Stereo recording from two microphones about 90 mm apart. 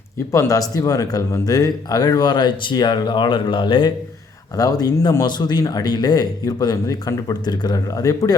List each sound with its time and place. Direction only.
0.3 s speech: 35° left (ahead or behind); by 3.9 s 65° left (ahead or behind)
4.5 s speech: 45° left (ahead or behind)